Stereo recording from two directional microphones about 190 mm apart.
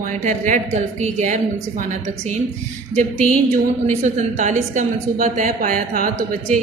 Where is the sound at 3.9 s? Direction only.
40° right (ahead or behind).